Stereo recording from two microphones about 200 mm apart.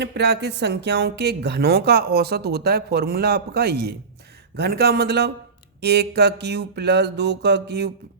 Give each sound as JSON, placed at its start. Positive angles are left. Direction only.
{"t": 0.0, "sound": "speech", "side_deg": -60}
{"t": 5.8, "sound": "mantra", "side_deg": -55}